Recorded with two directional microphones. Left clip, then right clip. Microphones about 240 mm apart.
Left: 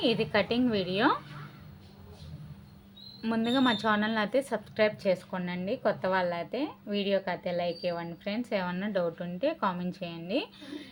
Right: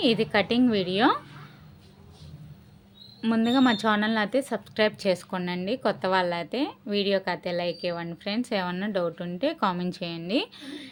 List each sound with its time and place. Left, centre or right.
0.0 s a woman's voice: right
3.2 s a woman's voice: right